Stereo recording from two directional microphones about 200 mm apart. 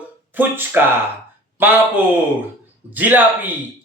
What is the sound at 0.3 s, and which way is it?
Speech, 10° right (ahead or behind).